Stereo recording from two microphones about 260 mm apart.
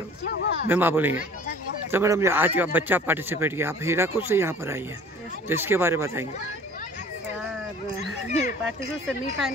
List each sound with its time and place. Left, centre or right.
0.2 s a sound: left
0.7 s speech: centre
8.3 s dog: left